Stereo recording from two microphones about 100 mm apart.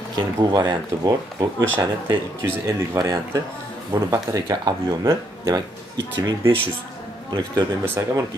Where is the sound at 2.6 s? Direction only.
30° right (ahead or behind).